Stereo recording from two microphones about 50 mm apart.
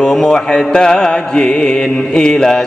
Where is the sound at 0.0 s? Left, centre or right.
Centre.